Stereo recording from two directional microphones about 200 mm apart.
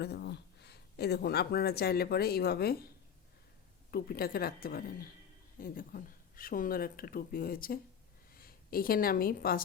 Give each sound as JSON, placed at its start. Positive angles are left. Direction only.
{"t": 0.0, "sound": "speech", "side_deg": 55}
{"t": 3.9, "sound": "a woman's voice", "side_deg": 50}